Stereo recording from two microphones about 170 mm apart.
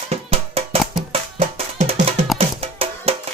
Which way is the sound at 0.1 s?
35° right (ahead or behind).